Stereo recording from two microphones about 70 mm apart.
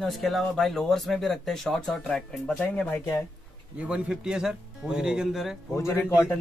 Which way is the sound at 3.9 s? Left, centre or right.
Centre.